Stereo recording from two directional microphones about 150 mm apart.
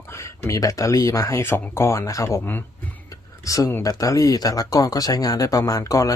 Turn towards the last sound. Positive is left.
turn(degrees=20)  # may be behind; listen again after turning